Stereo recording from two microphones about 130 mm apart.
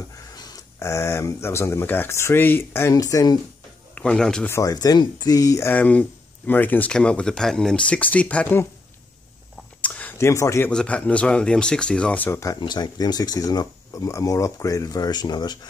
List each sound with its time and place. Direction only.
0.1 s speech: 30° left (ahead or behind)
3.9 s speech: 5° left (ahead or behind)
4.5 s speech: 25° left (ahead or behind)
9.8 s a sound: 10° left (ahead or behind)
10.1 s speech: 20° left (ahead or behind)
10.7 s speech: 5° left (ahead or behind)
12.5 s speech: 35° left (ahead or behind)